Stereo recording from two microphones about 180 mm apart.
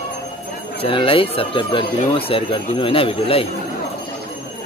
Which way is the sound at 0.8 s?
30° left (ahead or behind).